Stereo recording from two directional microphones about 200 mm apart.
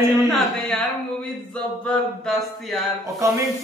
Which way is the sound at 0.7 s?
5° left (ahead or behind).